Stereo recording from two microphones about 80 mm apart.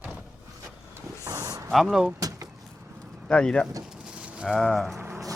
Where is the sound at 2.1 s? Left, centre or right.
Right.